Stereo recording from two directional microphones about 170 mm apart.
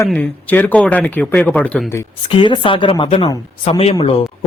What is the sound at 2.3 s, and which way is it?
Speech, 30° left (ahead or behind).